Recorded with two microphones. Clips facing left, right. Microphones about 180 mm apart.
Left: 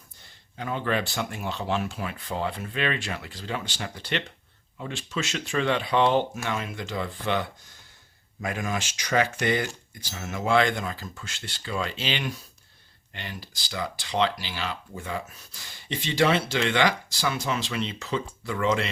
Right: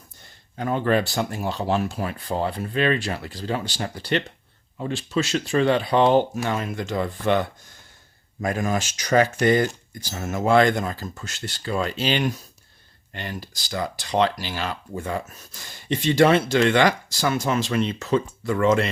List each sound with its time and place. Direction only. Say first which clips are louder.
0.5 s speech: right 6 dB; 45° right (ahead or behind)